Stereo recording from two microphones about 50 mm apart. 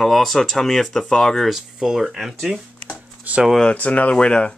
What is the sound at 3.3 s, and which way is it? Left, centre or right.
Speech, right.